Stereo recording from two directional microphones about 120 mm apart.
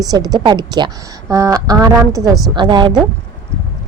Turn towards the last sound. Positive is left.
turn(degrees=-40)  # may be behind; listen again after turning